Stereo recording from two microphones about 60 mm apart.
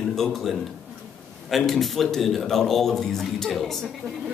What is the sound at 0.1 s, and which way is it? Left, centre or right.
Speech, centre.